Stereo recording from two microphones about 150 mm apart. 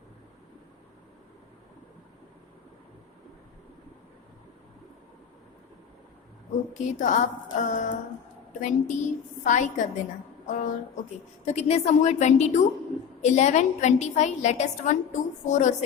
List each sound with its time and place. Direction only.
6.7 s a woman's voice: 55° left (ahead or behind)